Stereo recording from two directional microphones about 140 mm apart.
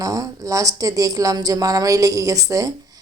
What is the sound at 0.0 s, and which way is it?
A woman's voice, 25° right (ahead or behind).